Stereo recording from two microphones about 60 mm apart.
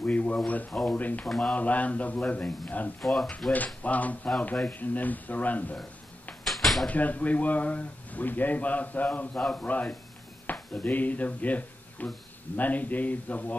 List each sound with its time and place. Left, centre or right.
0.0 s a sound: left
0.5 s speech: left
1.2 s speech: centre
1.5 s speech: left
3.0 s speech: centre
3.5 s speech: left
6.4 s a sound: centre
6.9 s speech: left